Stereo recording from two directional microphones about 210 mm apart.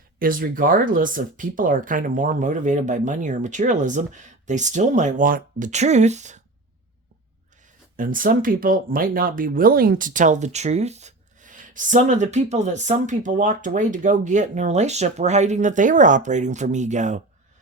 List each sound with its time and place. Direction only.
0.2 s speech: 40° right (ahead or behind)
7.9 s speech: 40° right (ahead or behind)